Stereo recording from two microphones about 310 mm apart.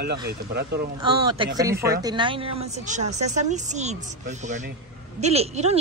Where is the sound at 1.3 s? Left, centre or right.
Centre.